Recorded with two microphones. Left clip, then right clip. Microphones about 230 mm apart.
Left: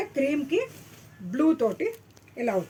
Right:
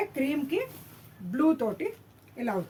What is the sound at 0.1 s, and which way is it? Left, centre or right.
Speech, right.